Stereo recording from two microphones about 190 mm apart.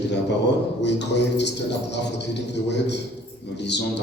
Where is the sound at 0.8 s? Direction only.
65° left (ahead or behind).